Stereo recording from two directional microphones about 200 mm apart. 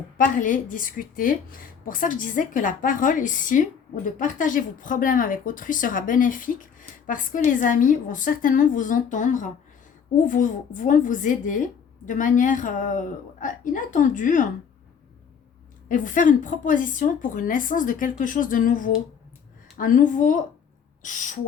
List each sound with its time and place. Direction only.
0.3 s a woman's voice: 40° left (ahead or behind)
15.9 s a woman's voice: 40° left (ahead or behind)